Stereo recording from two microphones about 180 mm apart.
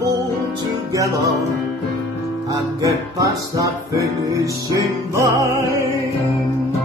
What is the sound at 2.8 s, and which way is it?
Music, 20° right (ahead or behind).